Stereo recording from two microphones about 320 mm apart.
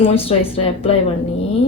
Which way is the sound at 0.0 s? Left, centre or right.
Centre.